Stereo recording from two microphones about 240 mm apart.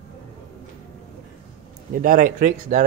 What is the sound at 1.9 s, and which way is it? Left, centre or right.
Speech, right.